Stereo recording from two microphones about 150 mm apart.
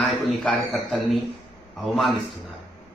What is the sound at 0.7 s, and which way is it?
A man's voice, centre (ahead or behind).